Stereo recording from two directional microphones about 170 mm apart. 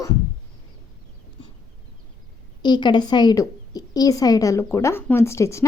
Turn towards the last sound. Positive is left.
turn(degrees=15)  # may be behind; listen again after turning